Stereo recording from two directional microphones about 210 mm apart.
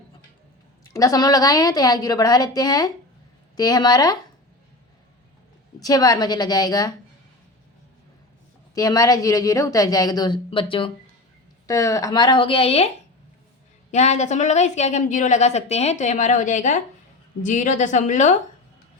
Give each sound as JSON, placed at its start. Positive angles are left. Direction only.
{"t": 0.9, "sound": "speech", "side_deg": 15}
{"t": 5.8, "sound": "speech", "side_deg": 15}
{"t": 8.7, "sound": "speech", "side_deg": 15}
{"t": 13.9, "sound": "a woman's voice", "side_deg": 35}